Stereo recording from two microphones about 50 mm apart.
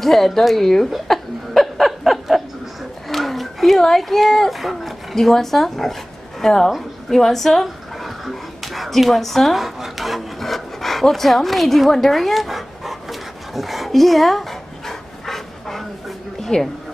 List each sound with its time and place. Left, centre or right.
0.0 s chuckle: centre
3.1 s speech: centre
6.7 s a sound: centre